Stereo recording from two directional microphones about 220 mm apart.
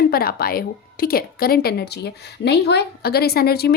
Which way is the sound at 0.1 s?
45° left (ahead or behind).